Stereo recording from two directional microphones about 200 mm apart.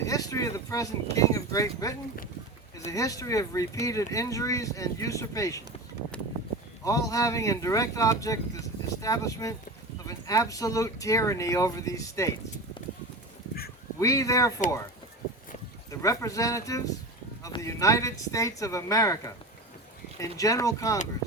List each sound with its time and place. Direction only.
0.0 s a sound: 15° left (ahead or behind)
1.1 s speech: 15° left (ahead or behind)
6.8 s speech: 15° left (ahead or behind)
14.0 s speech: 15° left (ahead or behind)
15.9 s speech: 15° left (ahead or behind)